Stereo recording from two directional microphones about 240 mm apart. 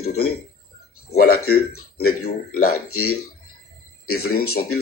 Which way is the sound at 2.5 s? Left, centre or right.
Left.